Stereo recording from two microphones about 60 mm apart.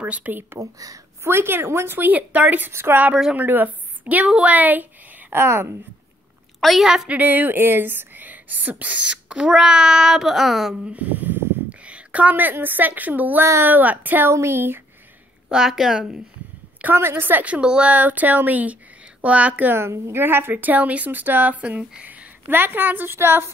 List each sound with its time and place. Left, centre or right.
0.0 s speech: right
0.6 s speech: right
1.2 s a woman's voice: right
2.7 s a woman's voice: right
3.3 s a woman's voice: right
5.3 s speech: right
6.6 s a woman's voice: centre
7.1 s speech: right; by 10.7 s centre
10.7 s a woman's voice: right
14.3 s speech: right
15.4 s a woman's voice: centre
16.9 s a woman's voice: right
17.6 s speech: centre
19.7 s a woman's voice: right